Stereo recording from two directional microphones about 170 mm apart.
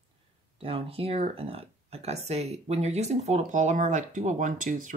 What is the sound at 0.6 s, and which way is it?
Speech, 35° right (ahead or behind).